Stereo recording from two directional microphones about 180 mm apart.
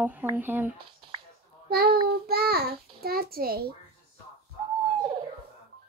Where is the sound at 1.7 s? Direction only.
60° right (ahead or behind).